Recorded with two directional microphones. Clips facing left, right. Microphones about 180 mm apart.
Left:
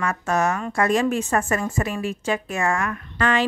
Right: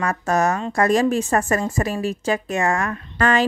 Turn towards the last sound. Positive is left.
turn(degrees=-40)  # may be behind; listen again after turning